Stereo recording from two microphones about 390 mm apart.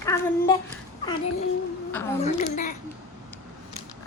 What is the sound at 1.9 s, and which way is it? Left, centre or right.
Speech, centre.